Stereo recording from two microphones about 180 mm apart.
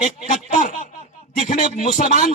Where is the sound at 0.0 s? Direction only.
40° left (ahead or behind).